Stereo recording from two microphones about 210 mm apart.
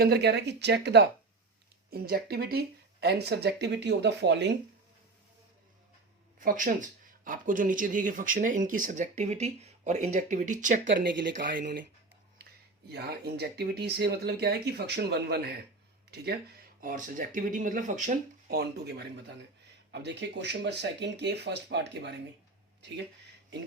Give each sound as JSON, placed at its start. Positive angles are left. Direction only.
{"t": 0.0, "sound": "speech", "side_deg": -50}
{"t": 6.4, "sound": "speech", "side_deg": -40}
{"t": 11.3, "sound": "speech", "side_deg": -50}
{"t": 12.9, "sound": "speech", "side_deg": -50}
{"t": 16.8, "sound": "speech", "side_deg": -40}